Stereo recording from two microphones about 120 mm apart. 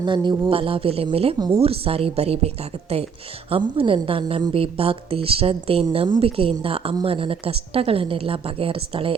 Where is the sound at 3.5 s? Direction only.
45° right (ahead or behind).